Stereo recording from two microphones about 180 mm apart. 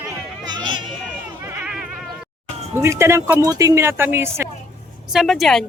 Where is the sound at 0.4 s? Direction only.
25° right (ahead or behind).